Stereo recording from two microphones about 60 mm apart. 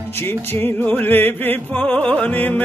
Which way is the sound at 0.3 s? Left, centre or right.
Left.